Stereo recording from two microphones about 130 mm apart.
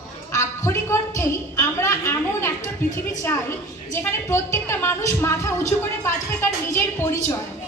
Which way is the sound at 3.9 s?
20° left (ahead or behind).